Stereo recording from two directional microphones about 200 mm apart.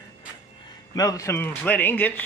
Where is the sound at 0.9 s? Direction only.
15° left (ahead or behind).